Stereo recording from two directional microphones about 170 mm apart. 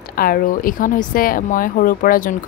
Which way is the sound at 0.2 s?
55° left (ahead or behind).